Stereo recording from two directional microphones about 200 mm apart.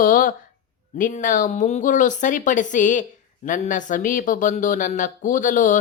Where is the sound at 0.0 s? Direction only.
45° left (ahead or behind).